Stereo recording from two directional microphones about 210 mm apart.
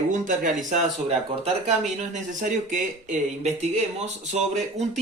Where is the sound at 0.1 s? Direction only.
40° right (ahead or behind).